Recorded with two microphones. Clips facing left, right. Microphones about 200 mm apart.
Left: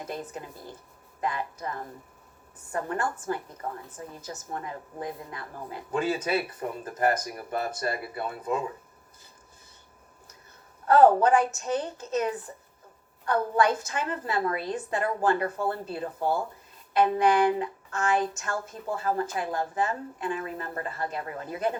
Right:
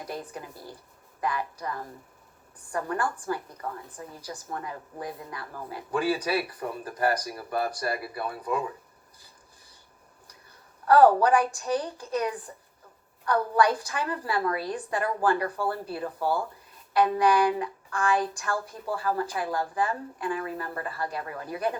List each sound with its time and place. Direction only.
0.0 s a woman's voice: 25° left (ahead or behind)
10.8 s a woman's voice: 25° left (ahead or behind)